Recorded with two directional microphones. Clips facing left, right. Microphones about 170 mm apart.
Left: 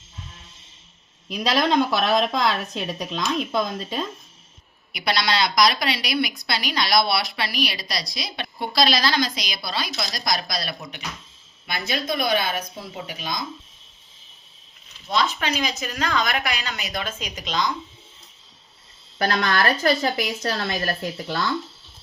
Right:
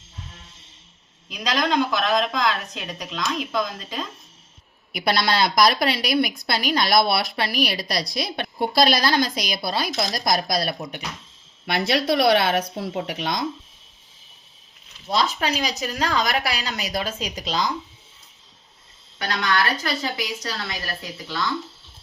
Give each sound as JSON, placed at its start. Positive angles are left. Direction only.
{"t": 1.9, "sound": "a woman's voice", "side_deg": 30}
{"t": 4.9, "sound": "a woman's voice", "side_deg": -50}
{"t": 11.9, "sound": "speech", "side_deg": -75}
{"t": 15.1, "sound": "a woman's voice", "side_deg": -35}
{"t": 19.2, "sound": "speech", "side_deg": 35}